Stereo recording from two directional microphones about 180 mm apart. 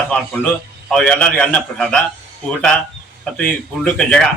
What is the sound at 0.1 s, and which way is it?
A man's voice, 10° left (ahead or behind).